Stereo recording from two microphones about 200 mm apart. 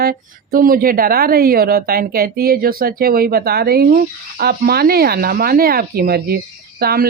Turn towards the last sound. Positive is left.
turn(degrees=-50)  # may be behind; listen again after turning